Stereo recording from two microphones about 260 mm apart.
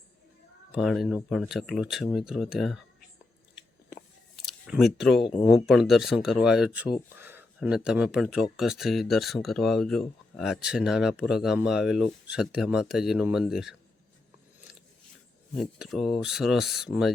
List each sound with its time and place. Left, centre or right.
0.7 s speech: centre
4.4 s a sound: centre
5.5 s speech: centre
15.5 s speech: centre